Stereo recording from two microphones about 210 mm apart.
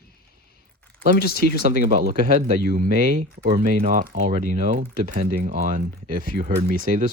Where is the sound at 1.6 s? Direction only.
40° right (ahead or behind).